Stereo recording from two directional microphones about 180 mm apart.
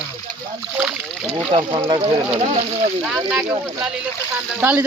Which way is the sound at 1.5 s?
25° right (ahead or behind).